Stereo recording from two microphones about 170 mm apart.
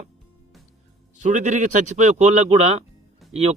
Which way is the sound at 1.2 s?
45° right (ahead or behind).